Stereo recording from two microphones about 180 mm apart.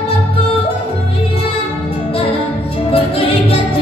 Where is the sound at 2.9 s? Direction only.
30° left (ahead or behind).